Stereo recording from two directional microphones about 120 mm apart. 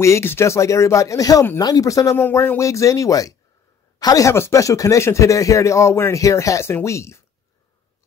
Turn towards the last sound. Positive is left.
turn(degrees=25)  # may be behind; listen again after turning